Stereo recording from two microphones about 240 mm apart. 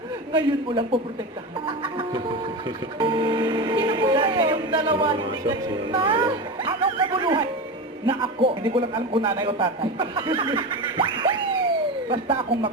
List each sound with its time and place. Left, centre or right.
0.3 s a man's voice: right
1.6 s a sound: right
3.0 s a man's voice: centre